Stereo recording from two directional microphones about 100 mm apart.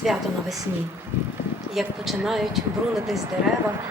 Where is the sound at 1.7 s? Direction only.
Centre (ahead or behind).